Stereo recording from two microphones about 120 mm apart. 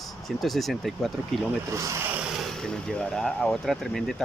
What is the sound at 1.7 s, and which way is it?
Speech, 25° right (ahead or behind).